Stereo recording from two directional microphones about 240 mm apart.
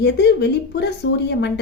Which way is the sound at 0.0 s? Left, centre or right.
Left.